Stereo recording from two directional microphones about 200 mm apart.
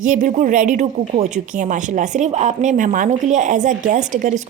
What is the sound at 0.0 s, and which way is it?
Speech, 40° right (ahead or behind).